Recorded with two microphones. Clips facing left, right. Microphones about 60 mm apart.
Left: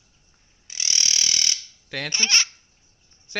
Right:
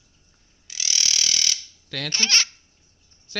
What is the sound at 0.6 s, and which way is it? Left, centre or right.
Ratchet, left.